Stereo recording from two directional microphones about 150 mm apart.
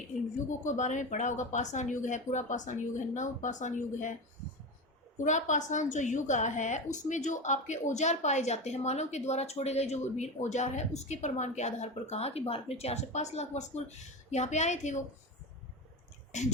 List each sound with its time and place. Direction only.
0.6 s speech: 55° left (ahead or behind)
5.1 s a woman's voice: 55° left (ahead or behind)